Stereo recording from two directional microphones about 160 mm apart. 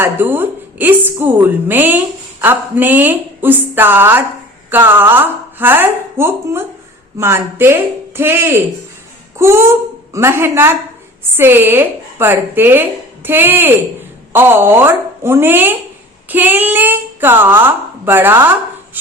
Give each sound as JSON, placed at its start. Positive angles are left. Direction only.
{"t": 0.0, "sound": "a woman's voice", "side_deg": -15}